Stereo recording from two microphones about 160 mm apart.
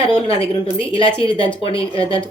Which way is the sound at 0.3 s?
35° left (ahead or behind).